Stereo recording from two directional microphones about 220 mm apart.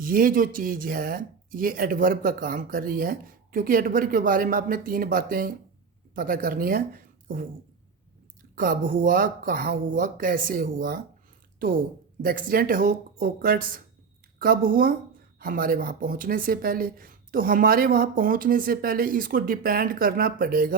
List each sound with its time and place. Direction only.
0.0 s speech: 40° right (ahead or behind)
8.5 s speech: 40° right (ahead or behind)
12.2 s speech: 40° right (ahead or behind)